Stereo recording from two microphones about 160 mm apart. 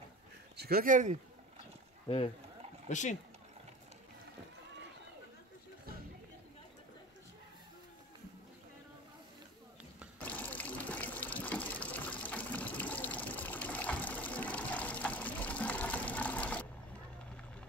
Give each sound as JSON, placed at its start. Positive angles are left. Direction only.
{"t": 0.6, "sound": "speech", "side_deg": -70}
{"t": 2.0, "sound": "speech", "side_deg": 40}
{"t": 2.9, "sound": "speech", "side_deg": 50}
{"t": 10.1, "sound": "sewing machine", "side_deg": 10}